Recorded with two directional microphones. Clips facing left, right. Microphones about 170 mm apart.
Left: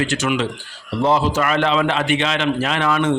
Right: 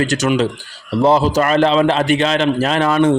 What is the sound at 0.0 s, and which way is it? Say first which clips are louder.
A man's voice: right 4 dB; 40° right (ahead or behind).